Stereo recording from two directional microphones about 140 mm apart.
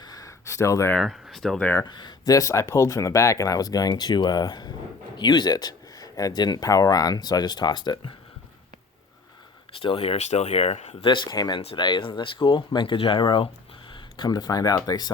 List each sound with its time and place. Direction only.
0.0 s a sound: 25° left (ahead or behind)
0.9 s speech: centre (ahead or behind)
1.6 s speech: 15° left (ahead or behind)
1.9 s speech: 35° left (ahead or behind)
9.8 s speech: 40° left (ahead or behind)